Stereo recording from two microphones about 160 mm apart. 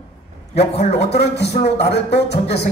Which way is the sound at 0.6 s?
40° left (ahead or behind).